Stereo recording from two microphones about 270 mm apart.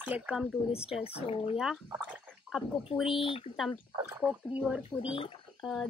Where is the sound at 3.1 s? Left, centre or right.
Centre.